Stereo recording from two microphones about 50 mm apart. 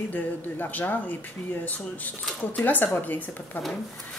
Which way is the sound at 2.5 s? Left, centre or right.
Left.